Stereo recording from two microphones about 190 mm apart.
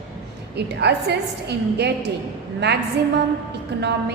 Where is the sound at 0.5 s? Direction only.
60° right (ahead or behind).